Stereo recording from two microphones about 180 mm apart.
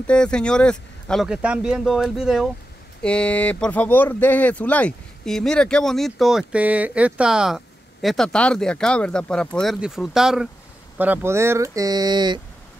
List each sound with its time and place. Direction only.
0.0 s speech: 5° left (ahead or behind); by 12.4 s 25° right (ahead or behind)